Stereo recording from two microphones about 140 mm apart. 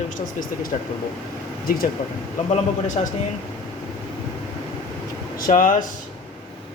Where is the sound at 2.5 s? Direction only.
65° left (ahead or behind).